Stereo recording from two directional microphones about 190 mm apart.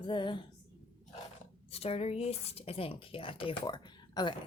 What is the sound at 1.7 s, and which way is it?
A woman's voice, 30° left (ahead or behind).